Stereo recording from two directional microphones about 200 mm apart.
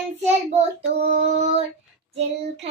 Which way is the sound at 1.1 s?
35° right (ahead or behind).